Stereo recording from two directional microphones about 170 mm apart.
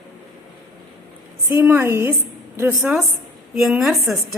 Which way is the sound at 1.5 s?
15° right (ahead or behind).